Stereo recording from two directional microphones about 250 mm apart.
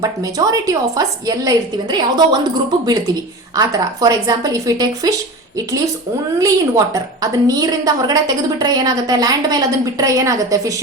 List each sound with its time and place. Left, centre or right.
0.0 s a woman's voice: centre